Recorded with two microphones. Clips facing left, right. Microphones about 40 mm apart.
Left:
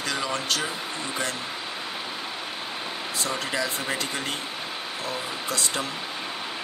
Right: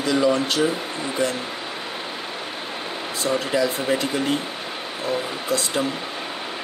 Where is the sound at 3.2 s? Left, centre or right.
Centre.